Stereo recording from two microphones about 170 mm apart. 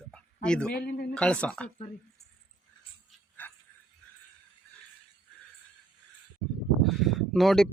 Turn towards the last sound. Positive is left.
turn(degrees=0)  # may be behind; listen again after turning